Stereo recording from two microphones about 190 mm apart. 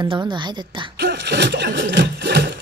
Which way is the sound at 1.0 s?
60° right (ahead or behind).